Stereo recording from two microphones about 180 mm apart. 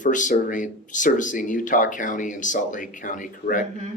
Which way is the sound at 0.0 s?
45° left (ahead or behind).